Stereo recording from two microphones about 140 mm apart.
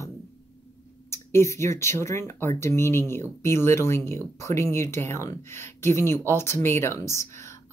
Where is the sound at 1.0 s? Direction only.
20° left (ahead or behind).